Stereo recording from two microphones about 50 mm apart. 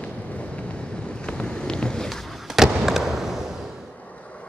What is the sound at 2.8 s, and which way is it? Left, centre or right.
Fireworks, centre.